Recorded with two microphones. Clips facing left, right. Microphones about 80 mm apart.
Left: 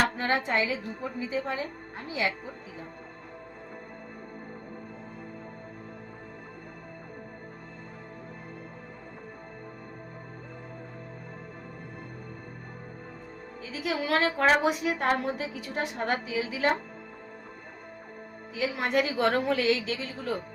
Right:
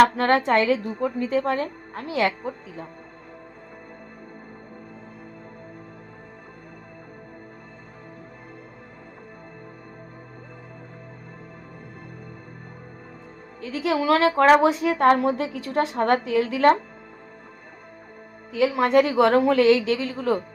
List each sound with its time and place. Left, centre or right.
0.0 s a woman's voice: right
13.7 s a woman's voice: right
18.5 s a woman's voice: right